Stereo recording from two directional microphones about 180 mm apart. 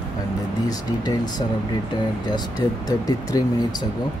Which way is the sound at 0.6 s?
20° left (ahead or behind).